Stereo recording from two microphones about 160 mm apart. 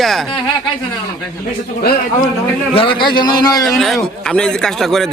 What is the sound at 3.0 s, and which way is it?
Speech, 25° left (ahead or behind).